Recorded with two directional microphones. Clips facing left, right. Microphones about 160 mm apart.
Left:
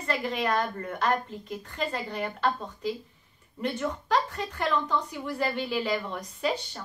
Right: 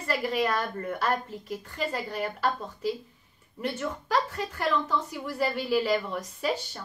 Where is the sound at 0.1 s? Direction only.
10° right (ahead or behind).